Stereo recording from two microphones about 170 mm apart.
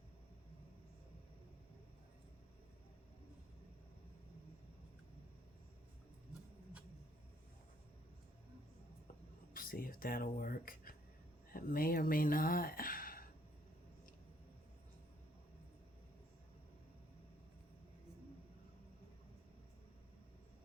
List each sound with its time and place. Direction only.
9.5 s speech: 55° left (ahead or behind)